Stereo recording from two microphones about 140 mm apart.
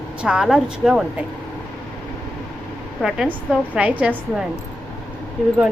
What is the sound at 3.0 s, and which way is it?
A woman's voice, 5° right (ahead or behind).